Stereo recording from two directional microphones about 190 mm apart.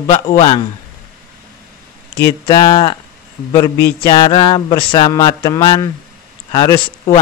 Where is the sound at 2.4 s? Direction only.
25° left (ahead or behind).